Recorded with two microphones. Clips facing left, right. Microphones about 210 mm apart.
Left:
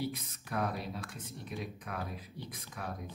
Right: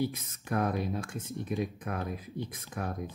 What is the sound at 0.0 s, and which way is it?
Speech, 50° right (ahead or behind).